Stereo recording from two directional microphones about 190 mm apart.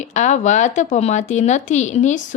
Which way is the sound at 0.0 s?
40° left (ahead or behind).